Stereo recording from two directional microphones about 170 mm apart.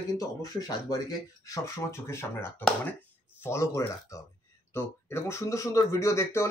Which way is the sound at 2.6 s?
5° left (ahead or behind).